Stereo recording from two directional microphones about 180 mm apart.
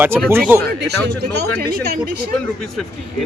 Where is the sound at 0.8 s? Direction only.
65° right (ahead or behind).